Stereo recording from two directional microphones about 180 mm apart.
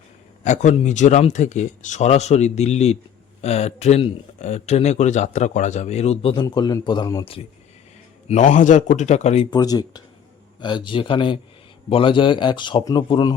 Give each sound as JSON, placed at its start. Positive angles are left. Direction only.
{"t": 0.4, "sound": "speech", "side_deg": 40}
{"t": 6.4, "sound": "a man's voice", "side_deg": 25}
{"t": 8.3, "sound": "speech", "side_deg": 45}
{"t": 9.5, "sound": "a man's voice", "side_deg": 20}